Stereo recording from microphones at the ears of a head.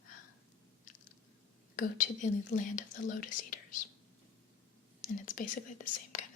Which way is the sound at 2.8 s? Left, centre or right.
Left.